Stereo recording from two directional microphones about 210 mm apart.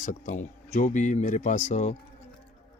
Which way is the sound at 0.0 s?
35° left (ahead or behind).